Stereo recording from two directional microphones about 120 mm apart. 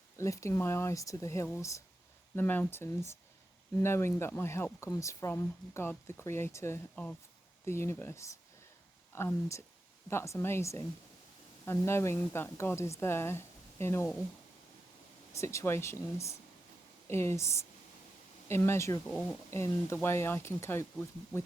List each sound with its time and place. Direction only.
0.2 s speech: 25° left (ahead or behind)
6.9 s speech: 10° left (ahead or behind)
15.3 s speech: 25° left (ahead or behind)
19.0 s speech: 5° left (ahead or behind)
19.5 s speech: 20° left (ahead or behind)